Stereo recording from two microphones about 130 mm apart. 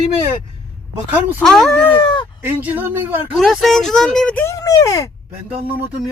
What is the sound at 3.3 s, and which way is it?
Speech, centre (ahead or behind).